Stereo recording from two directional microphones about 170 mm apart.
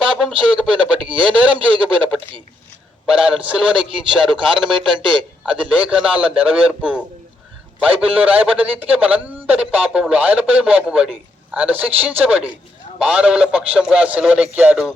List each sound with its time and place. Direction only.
0.0 s speech: 5° right (ahead or behind)